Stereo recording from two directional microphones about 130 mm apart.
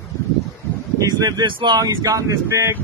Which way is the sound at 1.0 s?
30° right (ahead or behind).